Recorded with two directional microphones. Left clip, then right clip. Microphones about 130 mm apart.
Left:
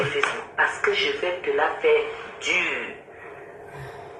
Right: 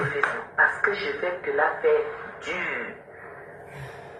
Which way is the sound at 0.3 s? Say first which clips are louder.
Even; 35° left (ahead or behind).